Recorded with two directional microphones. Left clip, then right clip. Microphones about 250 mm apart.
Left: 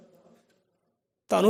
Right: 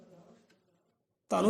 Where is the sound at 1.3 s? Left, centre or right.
Left.